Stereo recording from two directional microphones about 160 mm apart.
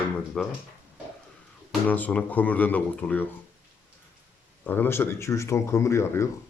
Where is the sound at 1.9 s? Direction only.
10° left (ahead or behind).